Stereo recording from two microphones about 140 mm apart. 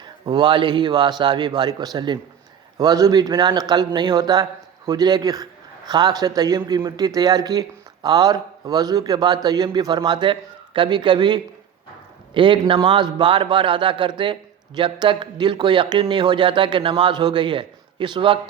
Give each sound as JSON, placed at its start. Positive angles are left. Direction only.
{"t": 0.0, "sound": "a man's voice", "side_deg": -35}